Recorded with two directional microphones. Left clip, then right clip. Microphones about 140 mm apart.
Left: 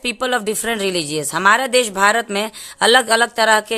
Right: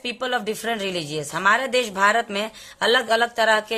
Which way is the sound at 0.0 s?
45° left (ahead or behind).